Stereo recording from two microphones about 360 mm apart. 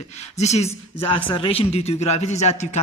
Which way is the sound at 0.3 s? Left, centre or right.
Centre.